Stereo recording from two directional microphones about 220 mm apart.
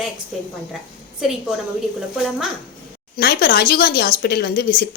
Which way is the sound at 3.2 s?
45° left (ahead or behind).